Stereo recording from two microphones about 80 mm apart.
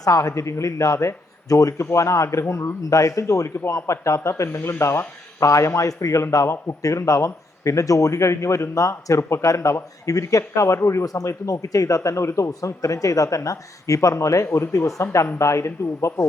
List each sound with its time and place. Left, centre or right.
0.0 s a man's voice: left